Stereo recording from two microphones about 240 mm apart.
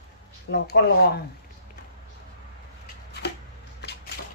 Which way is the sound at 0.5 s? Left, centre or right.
Left.